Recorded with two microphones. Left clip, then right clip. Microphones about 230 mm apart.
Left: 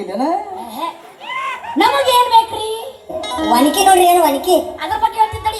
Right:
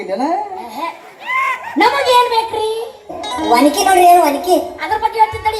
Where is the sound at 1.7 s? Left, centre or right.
Left.